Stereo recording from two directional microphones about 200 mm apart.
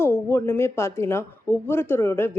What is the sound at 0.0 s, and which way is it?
Speech, 10° left (ahead or behind).